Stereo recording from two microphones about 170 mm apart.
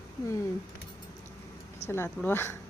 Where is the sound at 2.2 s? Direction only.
10° left (ahead or behind).